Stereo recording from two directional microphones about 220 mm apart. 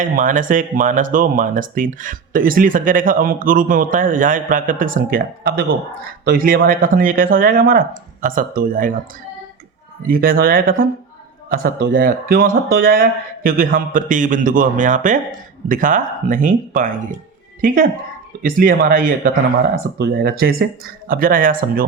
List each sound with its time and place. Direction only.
0.0 s speech: 35° right (ahead or behind)
10.1 s speech: 40° right (ahead or behind)
18.4 s speech: 40° right (ahead or behind)